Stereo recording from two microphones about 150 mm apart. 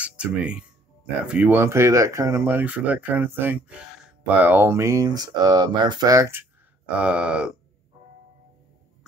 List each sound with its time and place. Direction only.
0.0 s speech: 10° right (ahead or behind)
7.0 s speech: 10° right (ahead or behind)